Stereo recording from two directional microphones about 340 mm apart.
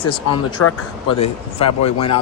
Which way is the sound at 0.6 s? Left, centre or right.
Left.